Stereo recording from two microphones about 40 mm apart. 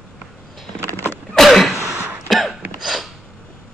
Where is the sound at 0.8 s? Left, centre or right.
Left.